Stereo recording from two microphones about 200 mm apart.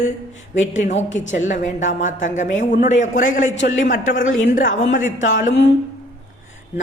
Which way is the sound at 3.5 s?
65° left (ahead or behind).